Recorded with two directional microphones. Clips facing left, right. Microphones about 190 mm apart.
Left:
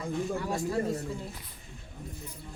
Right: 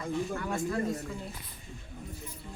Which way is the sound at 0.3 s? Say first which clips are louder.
Left 1 dB; 30° left (ahead or behind).